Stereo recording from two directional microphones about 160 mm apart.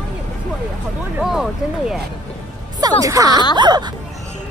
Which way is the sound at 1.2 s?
5° right (ahead or behind).